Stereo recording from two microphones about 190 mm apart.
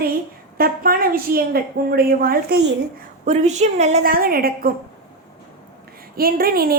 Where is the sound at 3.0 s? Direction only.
40° right (ahead or behind).